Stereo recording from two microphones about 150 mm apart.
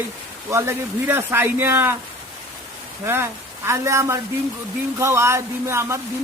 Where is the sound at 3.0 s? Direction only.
15° right (ahead or behind).